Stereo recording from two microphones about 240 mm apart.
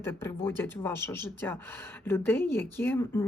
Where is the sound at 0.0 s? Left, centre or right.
Centre.